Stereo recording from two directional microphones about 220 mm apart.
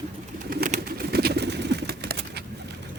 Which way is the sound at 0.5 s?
40° right (ahead or behind).